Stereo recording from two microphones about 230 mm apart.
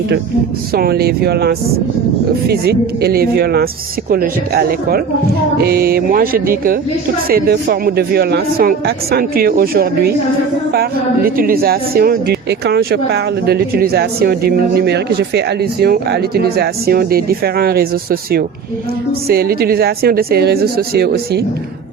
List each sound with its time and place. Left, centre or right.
0.7 s speech: right
11.3 s speech: right